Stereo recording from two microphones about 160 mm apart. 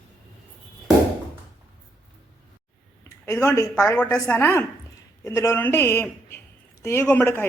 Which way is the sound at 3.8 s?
5° left (ahead or behind).